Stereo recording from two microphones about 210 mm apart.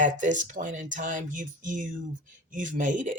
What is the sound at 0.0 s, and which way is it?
A woman's voice, 35° right (ahead or behind).